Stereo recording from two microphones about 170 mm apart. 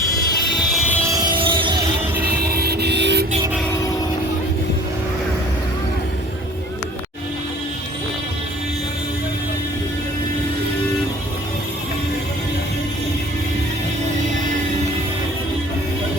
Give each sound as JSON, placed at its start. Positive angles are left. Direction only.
{"t": 0.8, "sound": "music", "side_deg": -10}
{"t": 1.1, "sound": "music", "side_deg": -25}
{"t": 2.3, "sound": "vehicle", "side_deg": -65}